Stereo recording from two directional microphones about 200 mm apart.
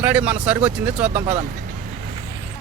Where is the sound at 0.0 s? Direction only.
5° right (ahead or behind).